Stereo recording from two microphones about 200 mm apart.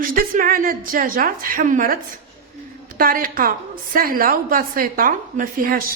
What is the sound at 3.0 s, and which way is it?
A woman's voice, 45° right (ahead or behind).